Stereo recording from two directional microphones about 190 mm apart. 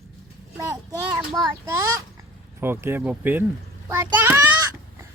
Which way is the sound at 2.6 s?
10° right (ahead or behind).